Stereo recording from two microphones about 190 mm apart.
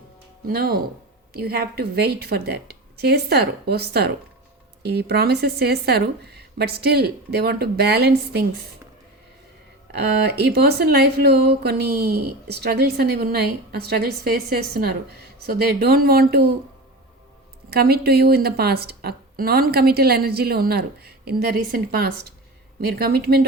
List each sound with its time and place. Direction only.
0.4 s speech: 55° right (ahead or behind)
9.9 s speech: 60° right (ahead or behind)
17.7 s speech: 55° right (ahead or behind)